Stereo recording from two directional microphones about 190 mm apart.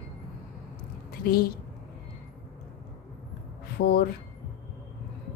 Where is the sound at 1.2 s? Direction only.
55° left (ahead or behind).